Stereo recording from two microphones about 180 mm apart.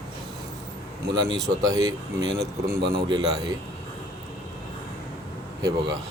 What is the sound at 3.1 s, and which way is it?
Speech, 20° right (ahead or behind).